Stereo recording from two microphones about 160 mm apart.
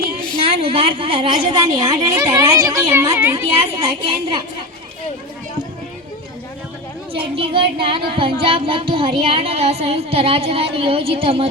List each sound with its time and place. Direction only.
0.4 s a woman's voice: 35° right (ahead or behind); by 3.4 s 20° right (ahead or behind)
3.6 s speech: 30° right (ahead or behind)
7.3 s speech: 35° right (ahead or behind)